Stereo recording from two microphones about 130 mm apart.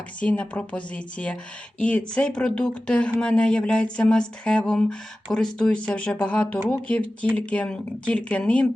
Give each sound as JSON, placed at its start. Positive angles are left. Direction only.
{"t": 0.2, "sound": "speech", "side_deg": 10}